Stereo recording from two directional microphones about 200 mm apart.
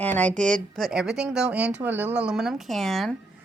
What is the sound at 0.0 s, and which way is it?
Speech, 5° left (ahead or behind).